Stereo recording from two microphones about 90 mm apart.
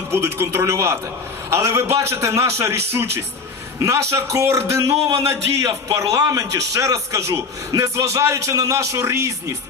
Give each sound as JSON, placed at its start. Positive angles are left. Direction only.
{"t": 0.1, "sound": "a man's voice", "side_deg": -25}